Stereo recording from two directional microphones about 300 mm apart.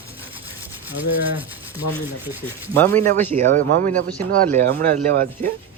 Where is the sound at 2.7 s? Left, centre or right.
Centre.